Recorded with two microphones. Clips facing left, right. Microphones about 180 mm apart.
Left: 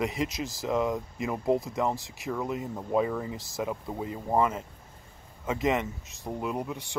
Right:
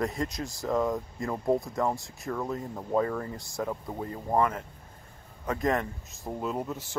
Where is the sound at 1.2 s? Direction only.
20° left (ahead or behind).